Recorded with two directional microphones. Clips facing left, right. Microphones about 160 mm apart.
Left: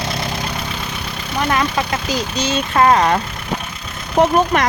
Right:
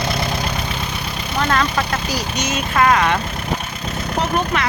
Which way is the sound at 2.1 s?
30° left (ahead or behind).